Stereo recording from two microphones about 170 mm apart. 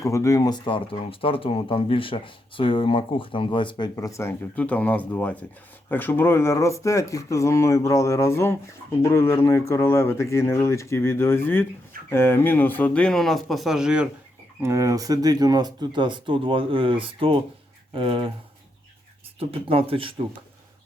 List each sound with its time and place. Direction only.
0.0 s speech: 15° left (ahead or behind); by 14.1 s 5° right (ahead or behind)
14.6 s speech: 15° right (ahead or behind)
19.4 s speech: 35° right (ahead or behind)